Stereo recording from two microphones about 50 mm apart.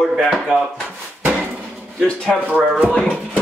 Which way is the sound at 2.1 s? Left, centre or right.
Centre.